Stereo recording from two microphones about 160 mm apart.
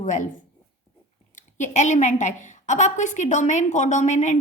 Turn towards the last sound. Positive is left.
turn(degrees=50)  # may be behind; listen again after turning